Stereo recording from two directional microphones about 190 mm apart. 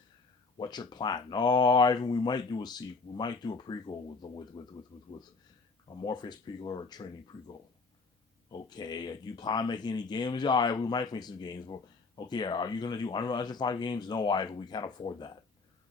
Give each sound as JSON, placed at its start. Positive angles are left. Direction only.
{"t": 0.5, "sound": "speech", "side_deg": 20}
{"t": 5.9, "sound": "speech", "side_deg": 25}